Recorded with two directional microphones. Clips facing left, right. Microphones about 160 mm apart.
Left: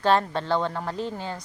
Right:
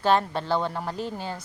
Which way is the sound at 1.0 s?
25° left (ahead or behind).